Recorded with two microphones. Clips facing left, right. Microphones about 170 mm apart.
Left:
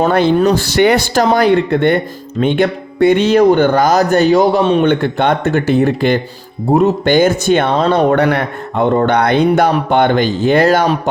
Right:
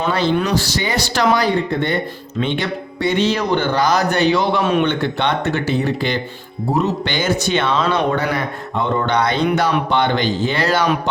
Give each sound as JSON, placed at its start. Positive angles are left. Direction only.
{"t": 0.0, "sound": "speech", "side_deg": 55}
{"t": 1.5, "sound": "speech", "side_deg": 60}
{"t": 4.6, "sound": "a man's voice", "side_deg": 30}
{"t": 4.9, "sound": "speech", "side_deg": 50}
{"t": 8.1, "sound": "speech", "side_deg": 60}